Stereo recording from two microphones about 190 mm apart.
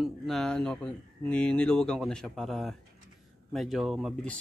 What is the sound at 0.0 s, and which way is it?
Speech, centre (ahead or behind).